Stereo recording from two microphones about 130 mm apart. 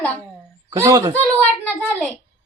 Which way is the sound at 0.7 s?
25° right (ahead or behind).